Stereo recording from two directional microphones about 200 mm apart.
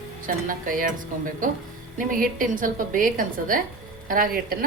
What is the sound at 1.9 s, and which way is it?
A woman's voice, 45° right (ahead or behind).